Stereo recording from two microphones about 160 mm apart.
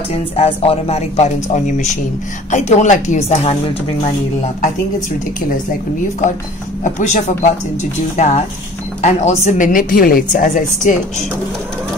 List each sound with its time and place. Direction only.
0.1 s a woman's voice: 40° left (ahead or behind)
6.8 s a woman's voice: 50° left (ahead or behind)